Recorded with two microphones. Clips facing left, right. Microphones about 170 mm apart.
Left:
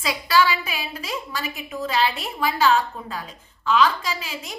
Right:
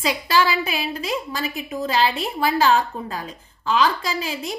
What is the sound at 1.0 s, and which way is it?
A woman's voice, 35° right (ahead or behind).